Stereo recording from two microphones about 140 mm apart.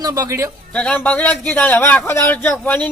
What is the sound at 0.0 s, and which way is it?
Speech, 25° right (ahead or behind).